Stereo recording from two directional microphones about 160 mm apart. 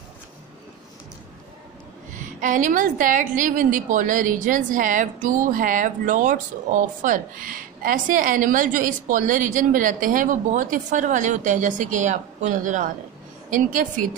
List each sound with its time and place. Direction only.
2.4 s a woman's voice: 55° right (ahead or behind)